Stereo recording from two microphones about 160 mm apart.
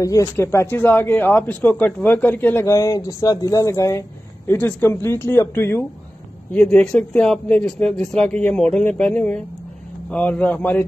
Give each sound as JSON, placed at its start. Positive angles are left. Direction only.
{"t": 0.0, "sound": "a man's voice", "side_deg": 20}